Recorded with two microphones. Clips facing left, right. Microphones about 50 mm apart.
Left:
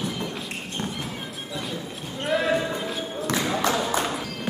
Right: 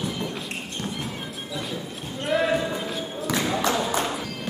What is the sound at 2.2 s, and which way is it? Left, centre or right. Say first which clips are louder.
Basketball bounce: even; centre.